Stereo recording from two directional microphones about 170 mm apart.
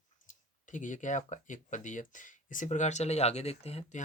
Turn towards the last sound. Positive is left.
turn(degrees=40)  # may be behind; listen again after turning